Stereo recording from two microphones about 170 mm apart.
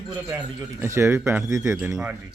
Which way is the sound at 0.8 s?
15° right (ahead or behind).